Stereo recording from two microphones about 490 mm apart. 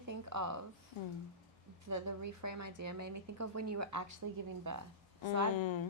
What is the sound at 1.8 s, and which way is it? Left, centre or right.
Speech, right.